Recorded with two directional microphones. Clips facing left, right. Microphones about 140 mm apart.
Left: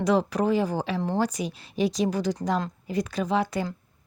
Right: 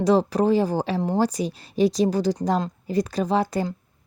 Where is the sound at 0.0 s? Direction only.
35° right (ahead or behind).